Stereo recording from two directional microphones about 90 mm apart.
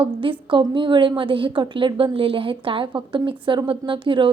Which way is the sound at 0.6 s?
60° right (ahead or behind).